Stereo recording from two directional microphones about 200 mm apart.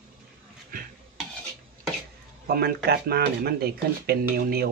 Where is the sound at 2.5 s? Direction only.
50° right (ahead or behind).